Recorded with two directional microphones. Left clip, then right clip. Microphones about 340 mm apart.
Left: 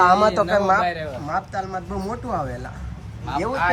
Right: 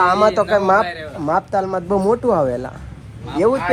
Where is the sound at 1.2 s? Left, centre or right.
Centre.